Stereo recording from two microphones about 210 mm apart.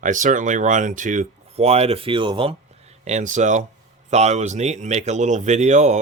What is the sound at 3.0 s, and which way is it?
Speech, 35° right (ahead or behind).